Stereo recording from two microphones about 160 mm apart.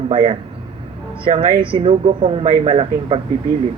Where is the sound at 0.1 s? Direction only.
40° right (ahead or behind).